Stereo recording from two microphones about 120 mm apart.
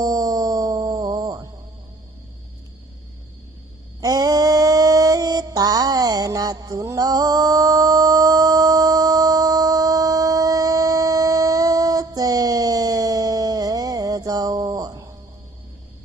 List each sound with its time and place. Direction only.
0.0 s music: 30° right (ahead or behind)
4.0 s mantra: 30° right (ahead or behind)